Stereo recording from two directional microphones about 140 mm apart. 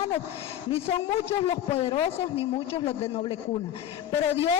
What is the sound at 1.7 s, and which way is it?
Speech, 45° left (ahead or behind).